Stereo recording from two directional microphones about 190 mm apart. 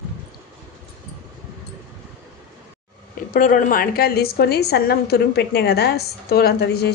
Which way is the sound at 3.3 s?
45° left (ahead or behind).